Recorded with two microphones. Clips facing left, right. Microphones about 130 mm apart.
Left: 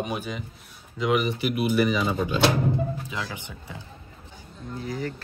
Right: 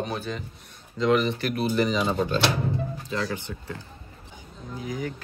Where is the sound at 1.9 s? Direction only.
25° right (ahead or behind).